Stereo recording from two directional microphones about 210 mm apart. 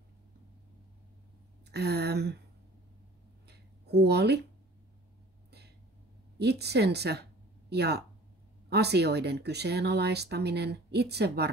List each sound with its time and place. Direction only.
1.7 s speech: 50° right (ahead or behind)
3.4 s a sound: 50° right (ahead or behind)
6.3 s speech: 50° right (ahead or behind)